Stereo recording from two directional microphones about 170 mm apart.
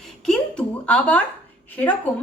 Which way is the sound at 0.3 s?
5° left (ahead or behind).